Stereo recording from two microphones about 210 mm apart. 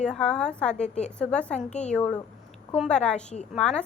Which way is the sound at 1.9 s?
5° left (ahead or behind).